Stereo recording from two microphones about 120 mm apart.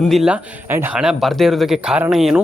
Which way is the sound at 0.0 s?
Centre (ahead or behind).